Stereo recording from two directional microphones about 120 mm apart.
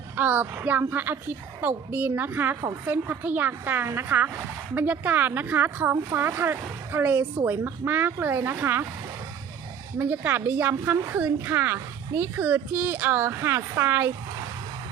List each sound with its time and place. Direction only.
0.2 s speech: 15° right (ahead or behind)
10.0 s speech: 15° right (ahead or behind)